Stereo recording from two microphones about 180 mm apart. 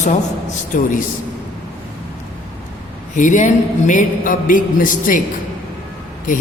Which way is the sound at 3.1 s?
45° left (ahead or behind).